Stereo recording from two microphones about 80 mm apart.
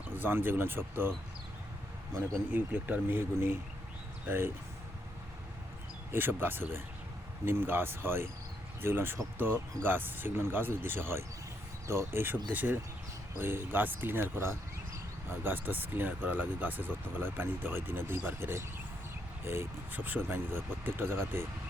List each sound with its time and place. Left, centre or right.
0.2 s speech: right
2.5 s speech: right
6.1 s speech: right